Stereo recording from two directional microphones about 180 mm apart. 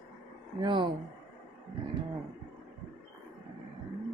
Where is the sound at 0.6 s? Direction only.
25° right (ahead or behind).